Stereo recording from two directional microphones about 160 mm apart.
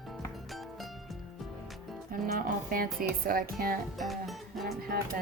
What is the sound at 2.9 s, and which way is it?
Speech, 65° right (ahead or behind).